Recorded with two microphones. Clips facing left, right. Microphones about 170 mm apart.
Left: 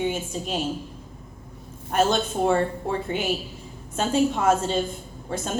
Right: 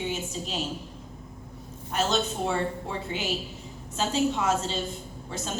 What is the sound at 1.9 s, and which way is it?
A woman's voice, 55° left (ahead or behind).